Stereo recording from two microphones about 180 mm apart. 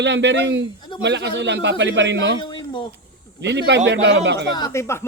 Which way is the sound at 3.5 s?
70° right (ahead or behind).